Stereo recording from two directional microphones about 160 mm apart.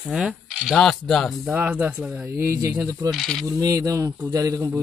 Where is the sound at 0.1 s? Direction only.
Centre (ahead or behind).